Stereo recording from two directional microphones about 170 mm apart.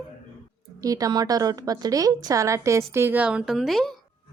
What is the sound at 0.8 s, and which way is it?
A woman's voice, 20° right (ahead or behind).